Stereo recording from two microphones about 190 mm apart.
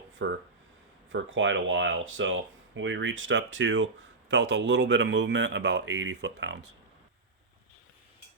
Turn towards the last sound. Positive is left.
turn(degrees=-65)  # may be behind; listen again after turning